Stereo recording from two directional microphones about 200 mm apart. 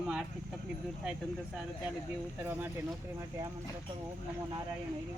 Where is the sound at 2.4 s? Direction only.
10° right (ahead or behind).